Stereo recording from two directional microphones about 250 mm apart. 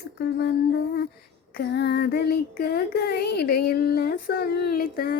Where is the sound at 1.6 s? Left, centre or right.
Left.